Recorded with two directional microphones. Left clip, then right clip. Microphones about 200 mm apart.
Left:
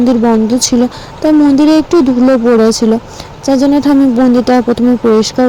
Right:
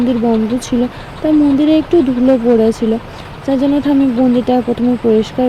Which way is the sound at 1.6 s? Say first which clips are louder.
Left 3 dB; 25° left (ahead or behind).